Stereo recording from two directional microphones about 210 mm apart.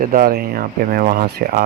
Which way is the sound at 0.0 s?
40° right (ahead or behind).